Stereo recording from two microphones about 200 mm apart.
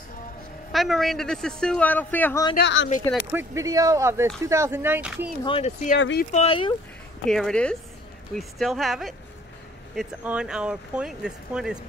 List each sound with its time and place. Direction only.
0.7 s speech: centre (ahead or behind)
2.5 s speech: 65° left (ahead or behind)
3.3 s speech: 10° right (ahead or behind)
5.4 s speech: 30° left (ahead or behind)
5.9 s speech: 65° left (ahead or behind)
6.3 s speech: 30° left (ahead or behind)
7.2 s speech: centre (ahead or behind)